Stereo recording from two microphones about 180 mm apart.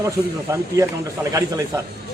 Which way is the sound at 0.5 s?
15° right (ahead or behind).